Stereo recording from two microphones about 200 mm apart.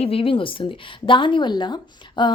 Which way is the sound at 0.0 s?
30° left (ahead or behind).